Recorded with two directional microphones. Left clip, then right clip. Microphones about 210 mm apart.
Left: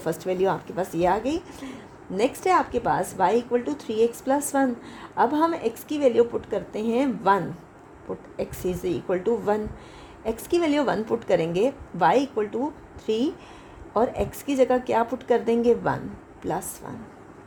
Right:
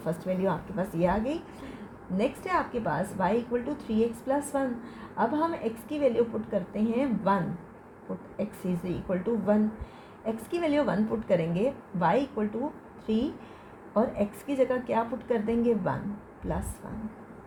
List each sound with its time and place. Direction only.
0.0 s a woman's voice: 40° left (ahead or behind)
8.4 s a woman's voice: 35° left (ahead or behind)